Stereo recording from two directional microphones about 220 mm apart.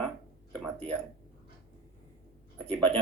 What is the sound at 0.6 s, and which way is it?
Speech, 5° left (ahead or behind).